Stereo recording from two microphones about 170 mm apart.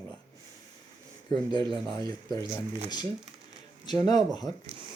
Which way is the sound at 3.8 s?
25° left (ahead or behind).